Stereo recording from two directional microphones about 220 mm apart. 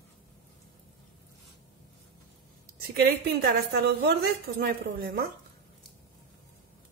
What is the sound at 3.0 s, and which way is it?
A woman's voice, 45° right (ahead or behind).